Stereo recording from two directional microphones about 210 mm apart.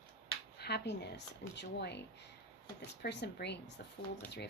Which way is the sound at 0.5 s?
50° left (ahead or behind).